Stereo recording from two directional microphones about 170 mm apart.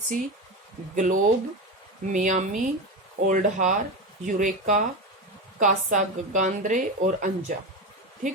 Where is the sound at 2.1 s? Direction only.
45° right (ahead or behind).